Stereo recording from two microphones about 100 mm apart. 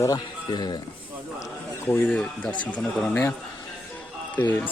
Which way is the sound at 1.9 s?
25° left (ahead or behind).